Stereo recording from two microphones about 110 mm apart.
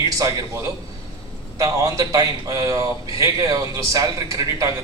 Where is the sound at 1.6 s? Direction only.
35° right (ahead or behind).